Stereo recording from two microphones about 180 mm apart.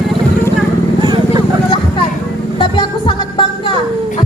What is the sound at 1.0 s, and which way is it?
Vehicle, 25° right (ahead or behind).